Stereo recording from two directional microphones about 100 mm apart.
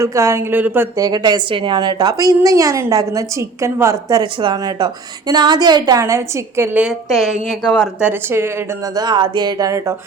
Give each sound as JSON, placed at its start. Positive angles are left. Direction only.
{"t": 0.0, "sound": "a woman's voice", "side_deg": -30}
{"t": 0.5, "sound": "speech", "side_deg": -20}
{"t": 0.9, "sound": "a woman's voice", "side_deg": -40}
{"t": 4.2, "sound": "speech", "side_deg": -50}
{"t": 4.5, "sound": "a woman's voice", "side_deg": -40}
{"t": 7.1, "sound": "a woman's voice", "side_deg": 0}
{"t": 9.0, "sound": "speech", "side_deg": -50}